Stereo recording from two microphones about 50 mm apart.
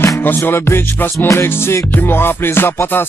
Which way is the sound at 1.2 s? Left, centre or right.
Left.